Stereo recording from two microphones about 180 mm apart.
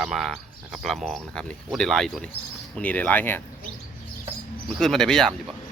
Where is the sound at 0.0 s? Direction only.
Centre (ahead or behind).